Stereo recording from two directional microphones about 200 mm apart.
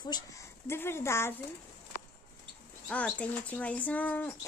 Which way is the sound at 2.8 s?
5° left (ahead or behind).